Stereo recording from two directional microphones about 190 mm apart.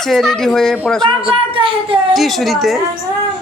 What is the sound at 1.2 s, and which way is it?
Speech, 30° right (ahead or behind).